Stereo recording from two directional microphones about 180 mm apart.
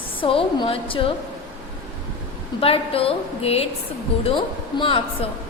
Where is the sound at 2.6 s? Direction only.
30° left (ahead or behind).